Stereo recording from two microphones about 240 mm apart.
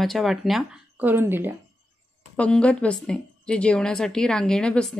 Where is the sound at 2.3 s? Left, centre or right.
Centre.